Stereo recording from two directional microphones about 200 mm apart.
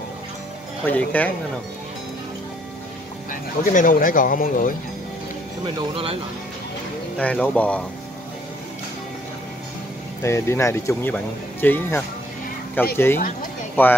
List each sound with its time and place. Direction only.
0.8 s speech: 10° left (ahead or behind)
3.3 s speech: 45° left (ahead or behind)
5.8 s speech: 25° right (ahead or behind)
7.2 s speech: 5° left (ahead or behind)
10.2 s speech: 15° left (ahead or behind)